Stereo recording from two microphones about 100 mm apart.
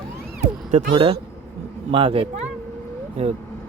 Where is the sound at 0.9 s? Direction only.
65° right (ahead or behind).